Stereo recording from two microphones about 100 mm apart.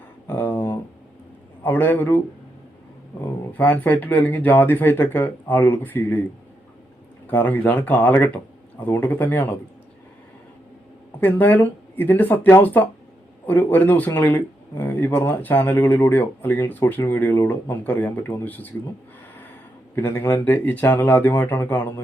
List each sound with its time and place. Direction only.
0.3 s a sound: 20° left (ahead or behind)
1.6 s speech: 20° left (ahead or behind)
3.6 s speech: 15° left (ahead or behind)
7.3 s speech: 20° left (ahead or behind)
11.2 s speech: 20° left (ahead or behind)
20.0 s speech: 20° left (ahead or behind)